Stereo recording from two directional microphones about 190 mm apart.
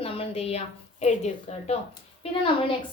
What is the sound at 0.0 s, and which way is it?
A woman's voice, 30° left (ahead or behind).